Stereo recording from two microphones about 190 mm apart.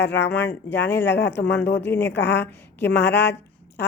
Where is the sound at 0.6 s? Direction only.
65° left (ahead or behind).